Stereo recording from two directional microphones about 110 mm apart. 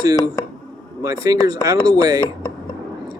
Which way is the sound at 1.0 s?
30° right (ahead or behind).